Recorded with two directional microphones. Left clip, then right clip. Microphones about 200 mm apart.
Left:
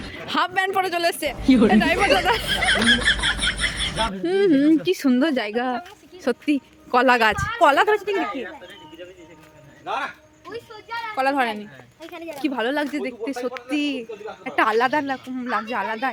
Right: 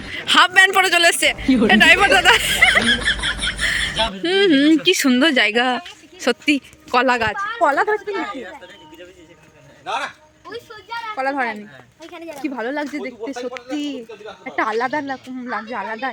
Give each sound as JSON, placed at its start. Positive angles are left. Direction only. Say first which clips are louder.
{"t": 0.0, "sound": "a man's voice", "louder": "right 9 dB", "side_deg": 0}
{"t": 9.8, "sound": "speech", "louder": "right 2 dB", "side_deg": -55}
{"t": 11.1, "sound": "a woman's voice", "louder": "left 1 dB", "side_deg": 0}